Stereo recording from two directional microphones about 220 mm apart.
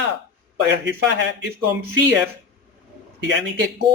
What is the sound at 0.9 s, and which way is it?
Speech, 55° right (ahead or behind).